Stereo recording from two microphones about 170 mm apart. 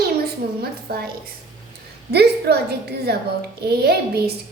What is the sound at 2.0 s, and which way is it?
A woman's voice, 70° right (ahead or behind).